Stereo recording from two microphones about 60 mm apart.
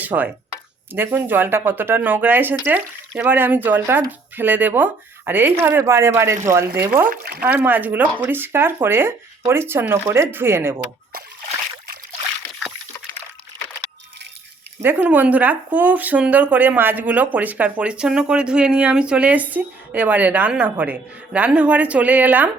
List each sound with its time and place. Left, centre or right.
0.0 s speech: right
14.9 s speech: right